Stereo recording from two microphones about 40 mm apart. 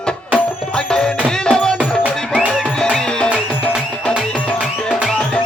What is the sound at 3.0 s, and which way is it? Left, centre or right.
Music, centre.